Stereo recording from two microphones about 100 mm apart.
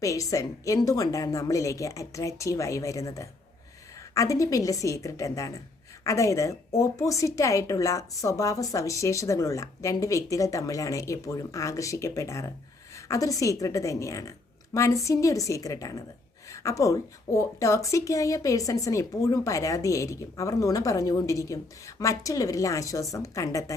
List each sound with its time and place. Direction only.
0.0 s a woman's voice: 35° left (ahead or behind)